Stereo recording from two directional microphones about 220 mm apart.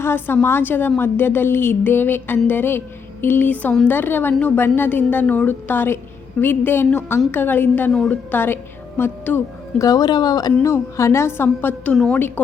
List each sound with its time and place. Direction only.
0.0 s a woman's voice: 10° left (ahead or behind)